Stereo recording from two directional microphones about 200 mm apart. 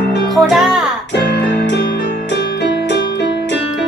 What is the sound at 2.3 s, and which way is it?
Music, 60° left (ahead or behind).